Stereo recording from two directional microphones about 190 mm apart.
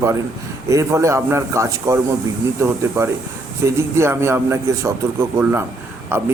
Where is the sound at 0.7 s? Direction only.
15° right (ahead or behind).